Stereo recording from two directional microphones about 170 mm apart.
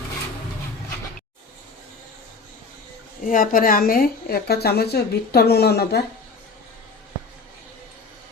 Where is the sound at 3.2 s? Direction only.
55° left (ahead or behind); by 6.0 s 70° left (ahead or behind).